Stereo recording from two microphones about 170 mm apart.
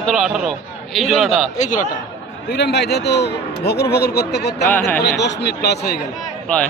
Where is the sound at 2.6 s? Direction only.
80° left.